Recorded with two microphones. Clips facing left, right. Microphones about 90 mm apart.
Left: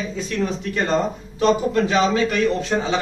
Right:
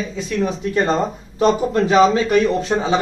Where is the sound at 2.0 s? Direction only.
15° right (ahead or behind).